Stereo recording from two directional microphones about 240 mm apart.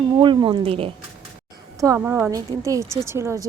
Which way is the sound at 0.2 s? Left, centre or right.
Centre.